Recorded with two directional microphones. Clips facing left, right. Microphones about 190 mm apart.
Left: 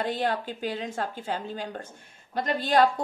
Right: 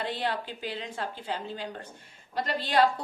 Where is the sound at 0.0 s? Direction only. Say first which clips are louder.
Left 4 dB; 45° left (ahead or behind).